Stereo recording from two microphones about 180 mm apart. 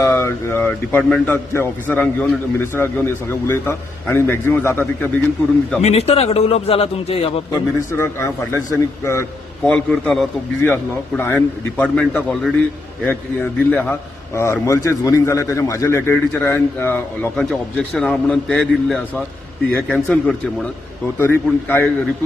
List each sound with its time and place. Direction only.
0.0 s a man's voice: 15° left (ahead or behind)
5.8 s a man's voice: 35° left (ahead or behind)
7.9 s a man's voice: 15° left (ahead or behind)